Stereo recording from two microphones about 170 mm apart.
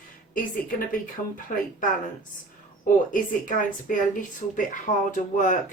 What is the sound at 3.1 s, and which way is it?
Speech, 50° left (ahead or behind).